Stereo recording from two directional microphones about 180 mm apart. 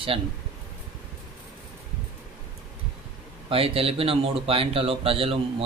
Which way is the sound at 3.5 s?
30° right (ahead or behind).